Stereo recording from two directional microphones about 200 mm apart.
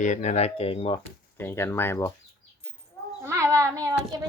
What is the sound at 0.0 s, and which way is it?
Speech, 35° left (ahead or behind).